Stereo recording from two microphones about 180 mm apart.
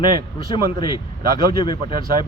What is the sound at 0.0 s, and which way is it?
Speech, 25° left (ahead or behind).